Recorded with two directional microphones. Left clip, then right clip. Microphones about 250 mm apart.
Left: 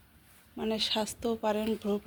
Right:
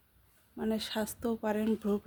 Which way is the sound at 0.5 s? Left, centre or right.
Centre.